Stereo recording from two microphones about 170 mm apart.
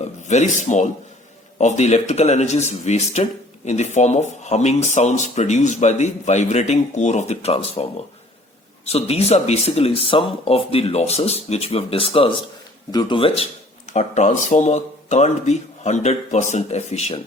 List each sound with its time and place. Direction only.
0.0 s speech: 45° left (ahead or behind)
8.9 s speech: 35° left (ahead or behind)